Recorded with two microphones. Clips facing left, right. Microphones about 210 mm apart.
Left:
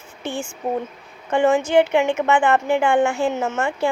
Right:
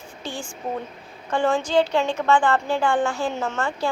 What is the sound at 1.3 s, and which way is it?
A woman's voice, 20° left (ahead or behind).